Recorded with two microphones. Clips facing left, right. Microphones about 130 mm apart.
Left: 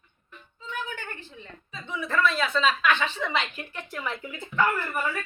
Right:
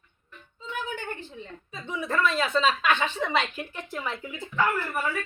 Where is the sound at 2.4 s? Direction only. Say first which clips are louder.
Even; 30° right (ahead or behind).